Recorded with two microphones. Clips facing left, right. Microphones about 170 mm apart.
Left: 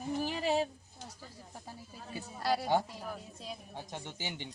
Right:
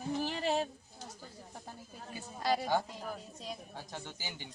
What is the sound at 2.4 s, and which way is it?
A woman's voice, 5° left (ahead or behind).